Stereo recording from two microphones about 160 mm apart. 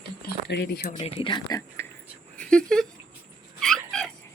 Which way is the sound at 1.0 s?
35° left (ahead or behind).